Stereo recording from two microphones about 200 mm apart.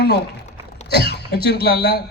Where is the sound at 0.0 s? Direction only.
55° left (ahead or behind).